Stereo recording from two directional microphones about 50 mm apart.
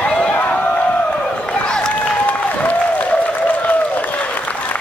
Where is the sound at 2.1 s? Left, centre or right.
Left.